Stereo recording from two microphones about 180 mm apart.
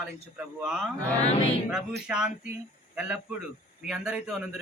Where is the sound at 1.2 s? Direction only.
35° left (ahead or behind).